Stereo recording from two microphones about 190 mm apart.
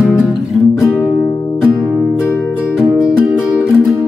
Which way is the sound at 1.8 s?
Centre (ahead or behind).